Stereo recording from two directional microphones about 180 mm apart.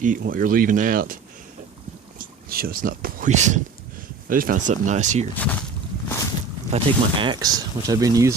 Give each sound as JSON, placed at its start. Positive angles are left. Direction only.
{"t": 0.0, "sound": "speech", "side_deg": -50}
{"t": 5.3, "sound": "speech", "side_deg": 10}
{"t": 6.7, "sound": "speech", "side_deg": -25}